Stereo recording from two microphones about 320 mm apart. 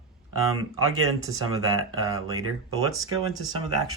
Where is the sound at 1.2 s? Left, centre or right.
Centre.